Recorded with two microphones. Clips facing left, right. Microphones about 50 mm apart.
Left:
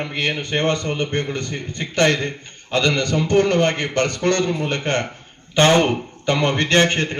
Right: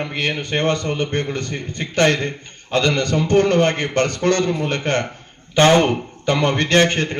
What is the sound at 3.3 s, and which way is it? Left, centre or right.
Speech, right.